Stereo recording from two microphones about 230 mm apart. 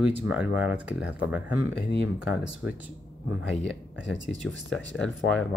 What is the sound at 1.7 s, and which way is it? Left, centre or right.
Speech, left.